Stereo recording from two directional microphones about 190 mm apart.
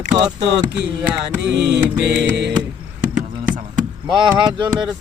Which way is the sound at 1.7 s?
65° right (ahead or behind).